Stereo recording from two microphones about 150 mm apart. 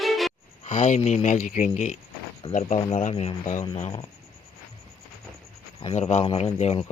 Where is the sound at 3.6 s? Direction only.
35° left (ahead or behind).